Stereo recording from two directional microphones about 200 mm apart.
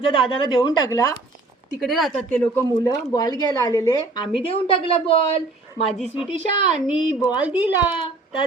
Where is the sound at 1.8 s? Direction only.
Centre (ahead or behind).